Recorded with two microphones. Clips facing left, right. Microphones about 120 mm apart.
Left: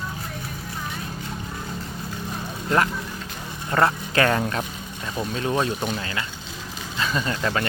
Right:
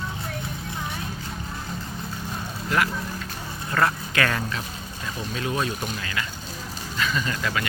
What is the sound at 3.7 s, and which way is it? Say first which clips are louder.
Speech: left 3 dB; 30° left (ahead or behind).